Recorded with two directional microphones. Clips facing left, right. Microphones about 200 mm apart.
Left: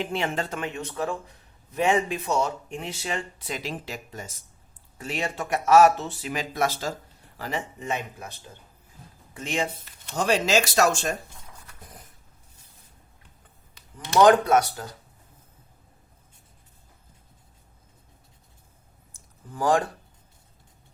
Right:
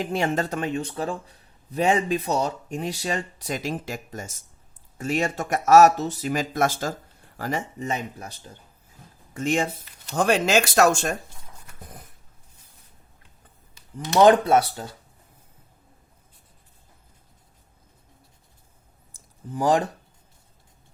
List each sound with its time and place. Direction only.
0.0 s speech: 40° right (ahead or behind)
9.3 s speech: 45° right (ahead or behind)
14.2 s speech: 25° right (ahead or behind)
19.5 s speech: 20° right (ahead or behind)